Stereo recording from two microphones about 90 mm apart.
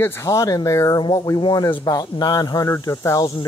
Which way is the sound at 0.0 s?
25° left (ahead or behind).